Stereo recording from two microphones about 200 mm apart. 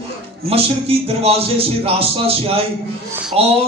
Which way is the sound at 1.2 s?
30° right (ahead or behind).